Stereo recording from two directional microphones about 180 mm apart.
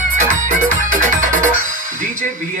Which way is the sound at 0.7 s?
45° right (ahead or behind).